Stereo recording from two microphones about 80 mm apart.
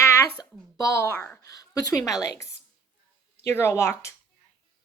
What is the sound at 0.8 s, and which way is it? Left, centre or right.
Speech, left.